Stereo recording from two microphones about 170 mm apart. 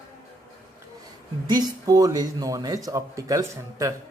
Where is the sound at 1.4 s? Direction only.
25° right (ahead or behind).